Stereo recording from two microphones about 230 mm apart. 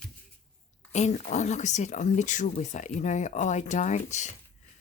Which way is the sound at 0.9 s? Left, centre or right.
Left.